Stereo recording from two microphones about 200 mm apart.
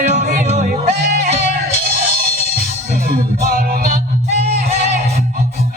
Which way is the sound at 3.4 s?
50° right (ahead or behind).